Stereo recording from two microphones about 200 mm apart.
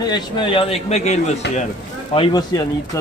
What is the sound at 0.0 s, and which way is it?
A man's voice, 20° left (ahead or behind).